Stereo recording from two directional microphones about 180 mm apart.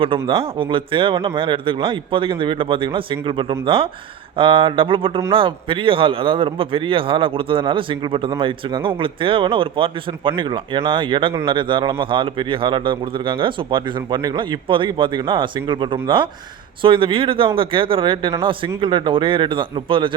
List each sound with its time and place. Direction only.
0.0 s a man's voice: 30° right (ahead or behind)